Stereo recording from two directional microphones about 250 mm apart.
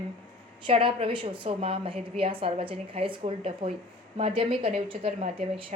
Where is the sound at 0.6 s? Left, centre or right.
Right.